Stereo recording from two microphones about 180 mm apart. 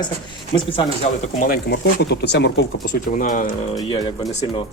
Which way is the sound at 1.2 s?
50° left (ahead or behind).